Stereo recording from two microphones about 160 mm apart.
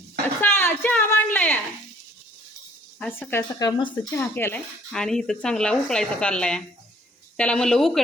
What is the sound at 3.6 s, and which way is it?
Speech, 30° left (ahead or behind).